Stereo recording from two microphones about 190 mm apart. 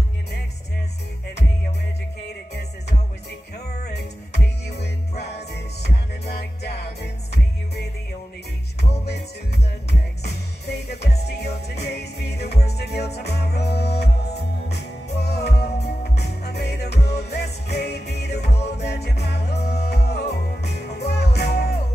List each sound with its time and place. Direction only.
3.9 s music: 60° left (ahead or behind)
10.2 s music: 60° left (ahead or behind)
18.5 s music: 35° left (ahead or behind)
18.9 s music: 60° left (ahead or behind)